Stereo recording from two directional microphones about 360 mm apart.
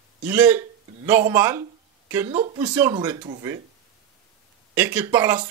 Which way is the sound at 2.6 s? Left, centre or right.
Centre.